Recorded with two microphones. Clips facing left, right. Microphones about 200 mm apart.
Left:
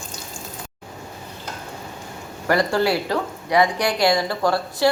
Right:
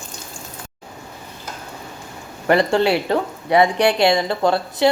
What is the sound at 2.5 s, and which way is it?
Speech, 25° right (ahead or behind).